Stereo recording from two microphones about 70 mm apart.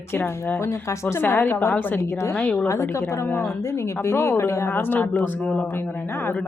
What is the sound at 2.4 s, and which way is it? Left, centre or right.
Speech, left.